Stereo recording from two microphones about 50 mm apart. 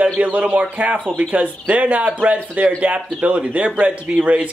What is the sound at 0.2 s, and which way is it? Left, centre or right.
Speech, right.